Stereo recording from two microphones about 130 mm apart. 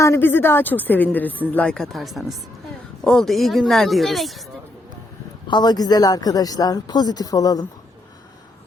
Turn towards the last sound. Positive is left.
turn(degrees=30)  # may be behind; listen again after turning